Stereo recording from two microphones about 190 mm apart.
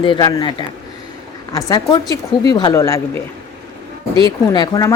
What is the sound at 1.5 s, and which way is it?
Speech, 20° left (ahead or behind).